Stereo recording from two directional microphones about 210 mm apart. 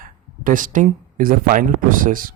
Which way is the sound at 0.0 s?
40° right (ahead or behind).